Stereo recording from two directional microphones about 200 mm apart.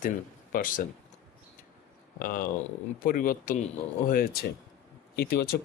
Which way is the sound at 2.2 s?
45° left (ahead or behind).